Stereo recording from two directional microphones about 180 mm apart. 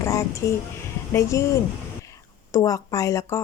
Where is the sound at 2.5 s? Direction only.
20° left (ahead or behind).